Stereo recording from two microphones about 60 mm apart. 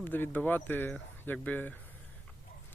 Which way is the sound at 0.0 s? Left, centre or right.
Left.